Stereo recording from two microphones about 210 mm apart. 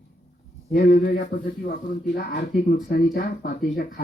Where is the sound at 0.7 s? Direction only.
45° left (ahead or behind).